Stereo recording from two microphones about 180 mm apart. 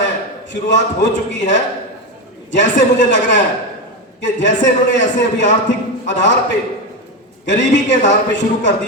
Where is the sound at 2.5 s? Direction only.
80° left.